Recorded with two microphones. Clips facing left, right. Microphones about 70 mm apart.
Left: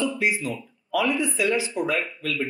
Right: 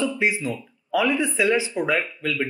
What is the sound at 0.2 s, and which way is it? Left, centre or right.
Speech, right.